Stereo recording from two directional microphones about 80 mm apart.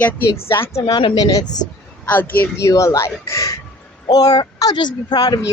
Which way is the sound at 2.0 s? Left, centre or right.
Left.